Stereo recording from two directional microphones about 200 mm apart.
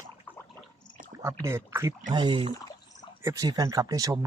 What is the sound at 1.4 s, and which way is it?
Speech, 15° right (ahead or behind).